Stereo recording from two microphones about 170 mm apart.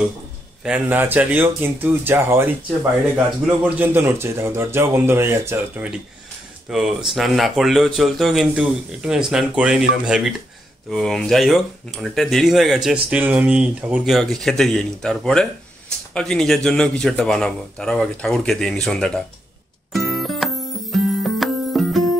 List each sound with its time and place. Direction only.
0.7 s speech: 10° right (ahead or behind)
6.7 s speech: centre (ahead or behind)
19.9 s music: centre (ahead or behind)